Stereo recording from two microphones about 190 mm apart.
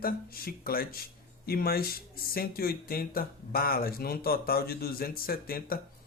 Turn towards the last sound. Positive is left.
turn(degrees=50)  # may be behind; listen again after turning